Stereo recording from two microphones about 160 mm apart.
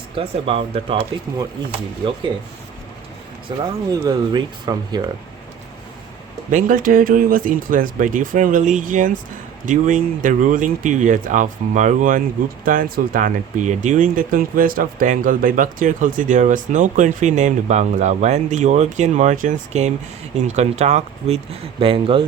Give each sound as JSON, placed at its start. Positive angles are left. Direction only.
{"t": 0.2, "sound": "speech", "side_deg": -35}
{"t": 3.6, "sound": "speech", "side_deg": -25}
{"t": 6.5, "sound": "speech", "side_deg": -55}